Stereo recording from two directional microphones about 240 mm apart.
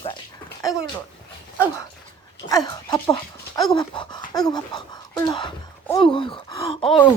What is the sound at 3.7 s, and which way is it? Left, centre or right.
Dog, centre.